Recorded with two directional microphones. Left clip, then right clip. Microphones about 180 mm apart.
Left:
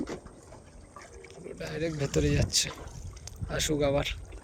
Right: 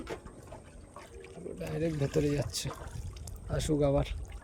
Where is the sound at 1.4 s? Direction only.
15° right (ahead or behind).